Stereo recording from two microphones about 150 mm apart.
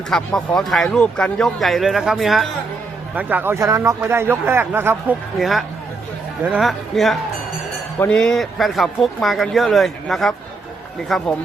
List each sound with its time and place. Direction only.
0.1 s speech: 5° left (ahead or behind)
3.2 s speech: 10° right (ahead or behind)
5.4 s speech: centre (ahead or behind)